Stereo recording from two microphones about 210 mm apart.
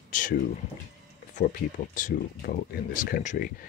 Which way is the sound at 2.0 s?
40° left (ahead or behind).